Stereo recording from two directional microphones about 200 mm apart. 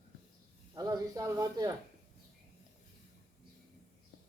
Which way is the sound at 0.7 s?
15° right (ahead or behind).